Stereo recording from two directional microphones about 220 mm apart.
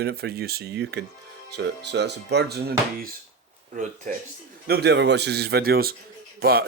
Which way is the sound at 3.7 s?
35° right (ahead or behind).